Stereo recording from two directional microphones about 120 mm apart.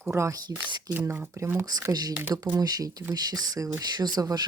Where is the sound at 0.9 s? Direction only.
15° right (ahead or behind); by 2.1 s 35° right (ahead or behind).